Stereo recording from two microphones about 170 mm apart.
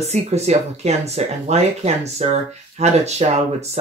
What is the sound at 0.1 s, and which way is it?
Speech, 40° right (ahead or behind).